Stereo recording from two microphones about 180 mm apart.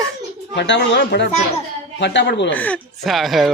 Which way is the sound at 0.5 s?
80° left.